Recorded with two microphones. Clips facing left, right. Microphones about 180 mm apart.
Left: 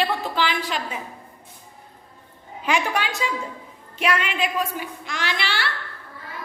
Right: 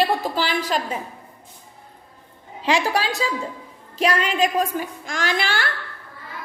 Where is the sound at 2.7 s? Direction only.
35° right (ahead or behind).